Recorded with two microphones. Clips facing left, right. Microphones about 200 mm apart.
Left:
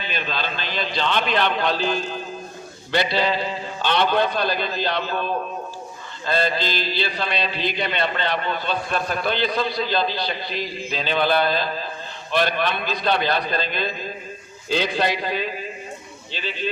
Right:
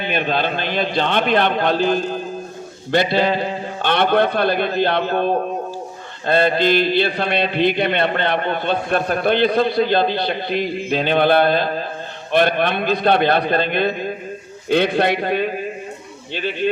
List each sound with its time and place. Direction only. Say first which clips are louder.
0.0 s a man's voice: right 8 dB; 55° right (ahead or behind)
2.9 s mantra: right 5 dB; 50° right (ahead or behind)